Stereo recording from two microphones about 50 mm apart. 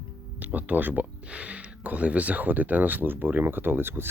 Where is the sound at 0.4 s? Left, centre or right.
Right.